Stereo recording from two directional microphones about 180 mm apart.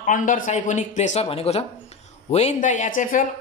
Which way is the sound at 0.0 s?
45° left (ahead or behind).